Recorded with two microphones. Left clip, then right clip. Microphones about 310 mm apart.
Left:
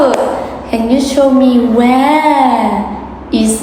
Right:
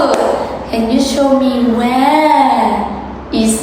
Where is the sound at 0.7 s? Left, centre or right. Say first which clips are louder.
Left 2 dB; left.